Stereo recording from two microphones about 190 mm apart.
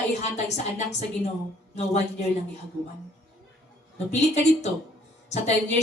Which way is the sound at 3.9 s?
35° left (ahead or behind).